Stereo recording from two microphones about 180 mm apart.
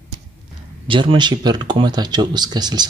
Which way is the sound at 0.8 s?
30° right (ahead or behind).